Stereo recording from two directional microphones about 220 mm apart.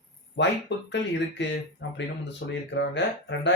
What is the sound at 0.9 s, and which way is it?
Speech, 55° left (ahead or behind).